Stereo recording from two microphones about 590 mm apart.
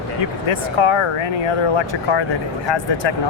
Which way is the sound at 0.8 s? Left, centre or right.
Left.